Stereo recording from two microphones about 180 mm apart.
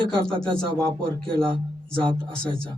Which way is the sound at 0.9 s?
30° right (ahead or behind).